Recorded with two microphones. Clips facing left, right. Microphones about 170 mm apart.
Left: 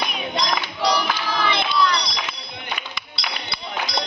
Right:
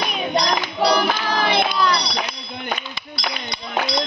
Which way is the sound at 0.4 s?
45° right (ahead or behind).